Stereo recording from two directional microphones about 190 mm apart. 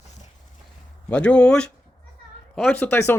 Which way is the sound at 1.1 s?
5° left (ahead or behind).